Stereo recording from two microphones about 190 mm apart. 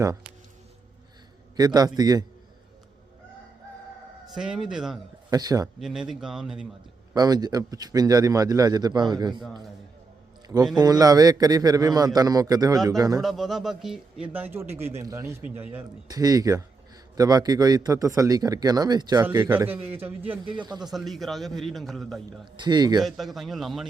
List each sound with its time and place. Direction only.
1.5 s a man's voice: 20° right (ahead or behind)
4.3 s speech: 5° right (ahead or behind)
5.3 s a man's voice: 20° right (ahead or behind)
5.8 s speech: centre (ahead or behind)
7.1 s a man's voice: 20° right (ahead or behind)
10.8 s a man's voice: 20° right (ahead or behind)
13.2 s a man's voice: centre (ahead or behind)
20.4 s a man's voice: 25° right (ahead or behind)
20.8 s speech: centre (ahead or behind)
22.5 s a man's voice: 25° right (ahead or behind)
23.0 s speech: centre (ahead or behind)